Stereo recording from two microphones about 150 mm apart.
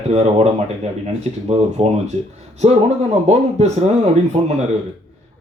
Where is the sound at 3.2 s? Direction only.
45° right (ahead or behind).